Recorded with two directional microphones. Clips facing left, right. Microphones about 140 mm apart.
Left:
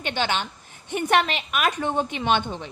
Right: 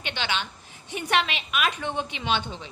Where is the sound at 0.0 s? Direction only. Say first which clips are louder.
Left 5 dB; 45° left (ahead or behind).